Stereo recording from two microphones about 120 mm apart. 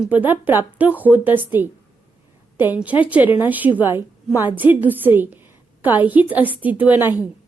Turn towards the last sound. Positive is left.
turn(degrees=-15)  # may be behind; listen again after turning